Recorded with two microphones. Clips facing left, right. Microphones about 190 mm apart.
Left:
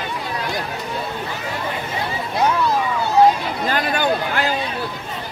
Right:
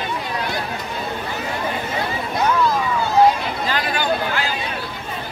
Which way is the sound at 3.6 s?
50° left (ahead or behind).